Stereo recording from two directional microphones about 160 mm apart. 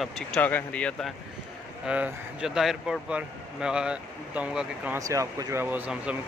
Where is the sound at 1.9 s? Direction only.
5° right (ahead or behind).